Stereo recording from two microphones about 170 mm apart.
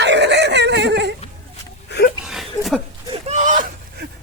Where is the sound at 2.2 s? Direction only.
Centre (ahead or behind).